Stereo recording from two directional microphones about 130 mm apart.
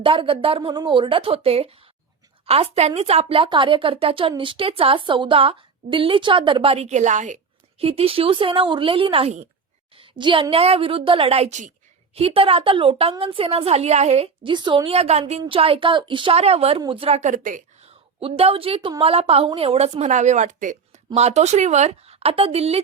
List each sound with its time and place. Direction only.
0.0 s a woman's voice: 45° right (ahead or behind); by 7.3 s 65° right (ahead or behind)
7.8 s a woman's voice: 50° right (ahead or behind)
12.1 s a woman's voice: 50° right (ahead or behind)
14.5 s a woman's voice: 35° right (ahead or behind)
14.9 s a woman's voice: 55° right (ahead or behind); by 17.6 s 90° right
17.8 s a woman's voice: 50° right (ahead or behind); by 21.0 s 85° right
21.2 s a woman's voice: 60° right (ahead or behind)